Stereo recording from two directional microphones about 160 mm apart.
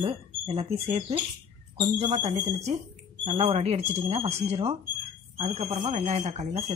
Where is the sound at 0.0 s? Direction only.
40° right (ahead or behind).